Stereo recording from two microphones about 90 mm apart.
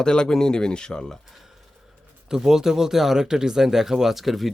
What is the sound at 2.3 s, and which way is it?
Speech, 5° right (ahead or behind).